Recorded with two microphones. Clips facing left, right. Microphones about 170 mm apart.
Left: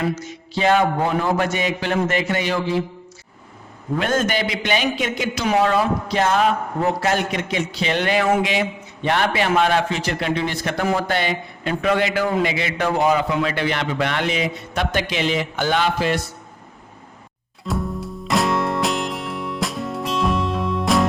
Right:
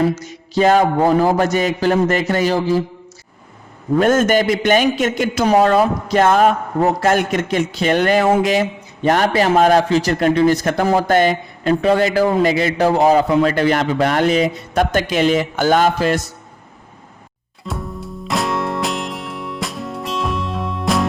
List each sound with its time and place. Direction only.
0.5 s a man's voice: 40° right (ahead or behind)
3.9 s a man's voice: 45° right (ahead or behind)
17.7 s music: centre (ahead or behind)